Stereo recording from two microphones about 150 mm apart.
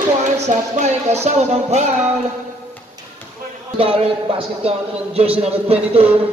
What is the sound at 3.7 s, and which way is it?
A man's voice, 40° right (ahead or behind).